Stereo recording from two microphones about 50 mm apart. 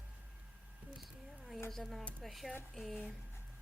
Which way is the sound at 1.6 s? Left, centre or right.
Centre.